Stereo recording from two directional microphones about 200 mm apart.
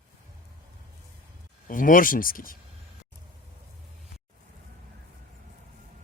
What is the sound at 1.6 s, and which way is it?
Speech, 40° left (ahead or behind).